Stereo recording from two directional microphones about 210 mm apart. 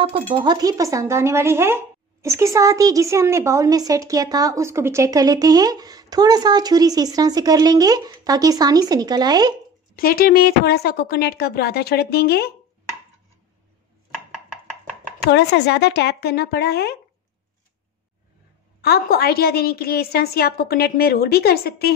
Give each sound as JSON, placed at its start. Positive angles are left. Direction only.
{"t": 0.0, "sound": "speech", "side_deg": -25}
{"t": 9.9, "sound": "a woman's voice", "side_deg": 45}
{"t": 15.3, "sound": "a woman's voice", "side_deg": 55}
{"t": 18.8, "sound": "a woman's voice", "side_deg": 50}